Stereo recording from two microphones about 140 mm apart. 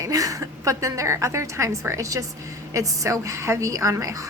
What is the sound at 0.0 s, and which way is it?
A woman's voice, 25° right (ahead or behind).